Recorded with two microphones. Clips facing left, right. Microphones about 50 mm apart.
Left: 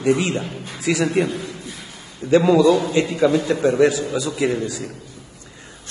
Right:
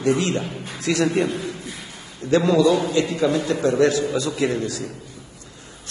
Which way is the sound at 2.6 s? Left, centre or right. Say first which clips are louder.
Left 2 dB; left.